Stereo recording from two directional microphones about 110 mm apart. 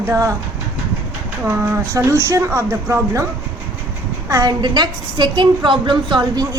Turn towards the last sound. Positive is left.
turn(degrees=-40)  # may be behind; listen again after turning